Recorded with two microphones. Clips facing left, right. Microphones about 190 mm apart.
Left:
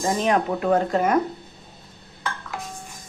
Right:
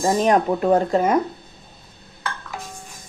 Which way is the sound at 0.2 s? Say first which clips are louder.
Right 4 dB; 40° right (ahead or behind).